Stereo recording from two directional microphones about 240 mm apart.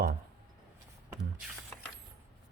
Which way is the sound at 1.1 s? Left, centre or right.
Centre.